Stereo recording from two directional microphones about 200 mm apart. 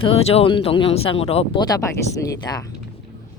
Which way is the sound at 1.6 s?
15° left (ahead or behind).